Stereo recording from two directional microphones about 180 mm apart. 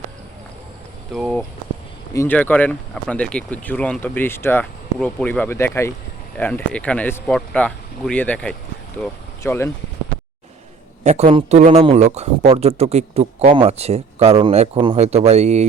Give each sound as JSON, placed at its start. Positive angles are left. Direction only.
{"t": 1.1, "sound": "speech", "side_deg": 0}
{"t": 2.1, "sound": "speech", "side_deg": 10}
{"t": 11.0, "sound": "speech", "side_deg": -35}